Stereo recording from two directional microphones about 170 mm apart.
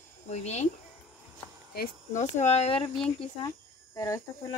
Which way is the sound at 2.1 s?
45° left (ahead or behind).